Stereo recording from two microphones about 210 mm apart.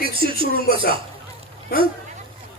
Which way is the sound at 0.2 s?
45° left (ahead or behind).